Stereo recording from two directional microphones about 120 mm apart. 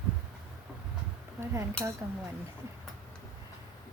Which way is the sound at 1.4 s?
20° right (ahead or behind).